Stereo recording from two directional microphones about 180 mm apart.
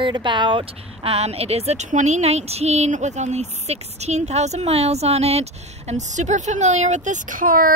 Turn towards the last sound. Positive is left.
turn(degrees=-50)  # may be behind; listen again after turning